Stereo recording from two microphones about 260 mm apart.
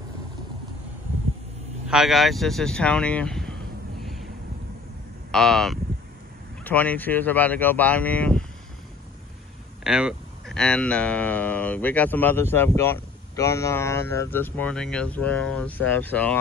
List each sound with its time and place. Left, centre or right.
1.9 s speech: centre
4.0 s a sound: centre
5.3 s speech: centre
9.8 s speech: centre